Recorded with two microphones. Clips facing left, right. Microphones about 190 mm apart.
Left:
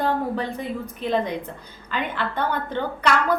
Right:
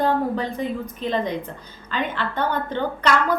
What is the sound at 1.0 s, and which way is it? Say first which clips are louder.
A woman's voice: left 1 dB; 5° left (ahead or behind).